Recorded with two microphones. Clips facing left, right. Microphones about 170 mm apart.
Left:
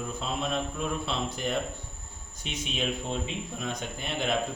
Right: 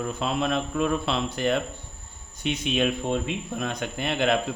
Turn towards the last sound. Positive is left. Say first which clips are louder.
# right 6 dB
turn(degrees=-75)  # may be behind; listen again after turning